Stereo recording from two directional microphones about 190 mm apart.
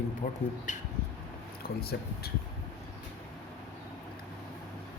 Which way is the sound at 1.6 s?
55° left (ahead or behind).